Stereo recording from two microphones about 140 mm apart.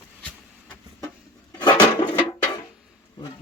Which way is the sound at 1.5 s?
30° left (ahead or behind).